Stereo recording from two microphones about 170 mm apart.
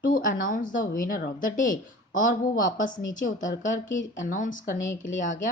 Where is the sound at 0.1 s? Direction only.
55° left (ahead or behind).